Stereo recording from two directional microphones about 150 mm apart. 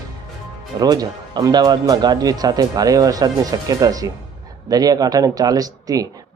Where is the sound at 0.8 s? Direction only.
25° right (ahead or behind).